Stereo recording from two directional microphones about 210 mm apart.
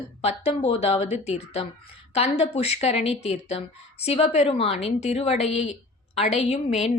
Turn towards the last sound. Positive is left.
turn(degrees=30)  # may be behind; listen again after turning